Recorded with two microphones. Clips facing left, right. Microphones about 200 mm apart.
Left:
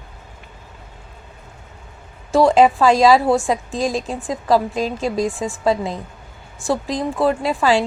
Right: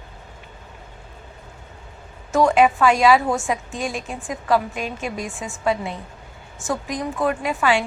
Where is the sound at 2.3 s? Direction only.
35° left (ahead or behind).